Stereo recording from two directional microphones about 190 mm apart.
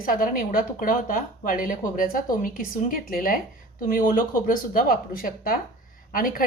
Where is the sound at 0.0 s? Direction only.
45° left (ahead or behind).